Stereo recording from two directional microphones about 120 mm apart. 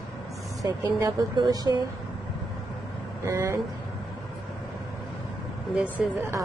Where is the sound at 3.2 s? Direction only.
25° right (ahead or behind).